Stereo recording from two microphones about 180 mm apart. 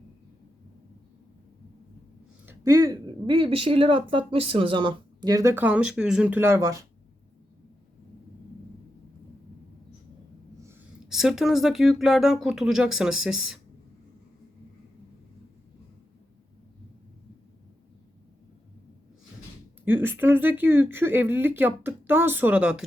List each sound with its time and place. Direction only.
2.5 s speech: 20° right (ahead or behind)
11.1 s speech: centre (ahead or behind)
19.8 s speech: 10° right (ahead or behind)